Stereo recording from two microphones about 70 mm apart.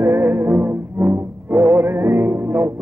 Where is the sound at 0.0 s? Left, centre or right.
Right.